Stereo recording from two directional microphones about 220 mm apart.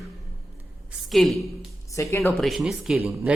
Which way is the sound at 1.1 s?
Centre (ahead or behind).